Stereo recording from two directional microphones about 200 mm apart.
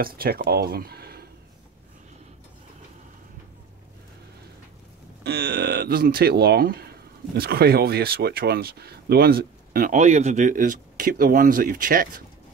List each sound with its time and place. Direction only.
0.0 s speech: 50° right (ahead or behind)
5.2 s speech: 50° right (ahead or behind)